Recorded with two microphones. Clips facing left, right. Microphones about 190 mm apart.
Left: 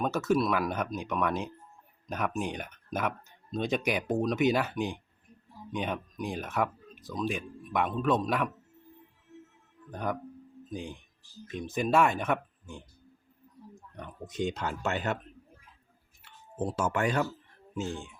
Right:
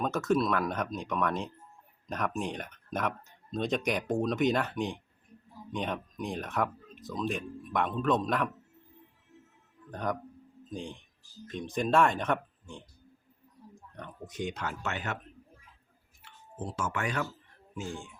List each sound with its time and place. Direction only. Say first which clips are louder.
0.0 s speech: left 1 dB; centre (ahead or behind)
9.9 s speech: even; 5° left (ahead or behind)
14.3 s speech: left 4 dB; 25° left (ahead or behind)
16.7 s speech: left 4 dB; 35° left (ahead or behind)
17.7 s speech: left 4 dB; 20° left (ahead or behind)